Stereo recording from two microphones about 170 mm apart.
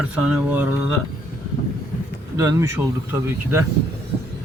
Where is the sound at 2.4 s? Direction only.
20° right (ahead or behind).